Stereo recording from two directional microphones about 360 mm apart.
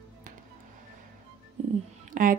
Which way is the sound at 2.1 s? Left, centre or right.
Right.